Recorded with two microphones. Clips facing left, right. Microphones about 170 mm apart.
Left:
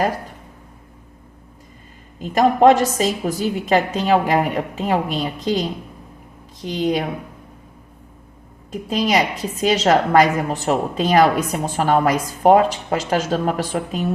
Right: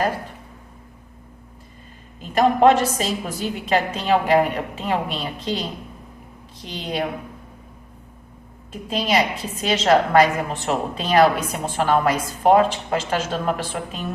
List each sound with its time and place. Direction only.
2.2 s a woman's voice: 40° left (ahead or behind)
8.7 s a woman's voice: 40° left (ahead or behind)